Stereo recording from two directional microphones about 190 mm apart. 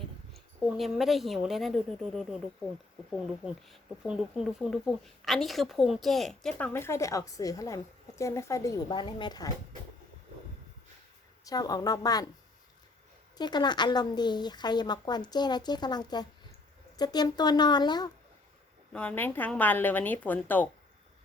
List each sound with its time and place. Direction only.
0.3 s a woman's voice: centre (ahead or behind); by 9.5 s 20° left (ahead or behind)
11.4 s speech: 20° left (ahead or behind)
13.3 s speech: 20° left (ahead or behind)
18.9 s speech: 10° left (ahead or behind)